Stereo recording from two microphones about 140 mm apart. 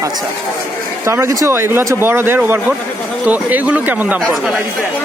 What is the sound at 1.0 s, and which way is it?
Speech, 20° right (ahead or behind).